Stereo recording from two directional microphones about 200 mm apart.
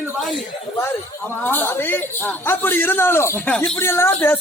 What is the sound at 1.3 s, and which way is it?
A man's voice, 10° left (ahead or behind).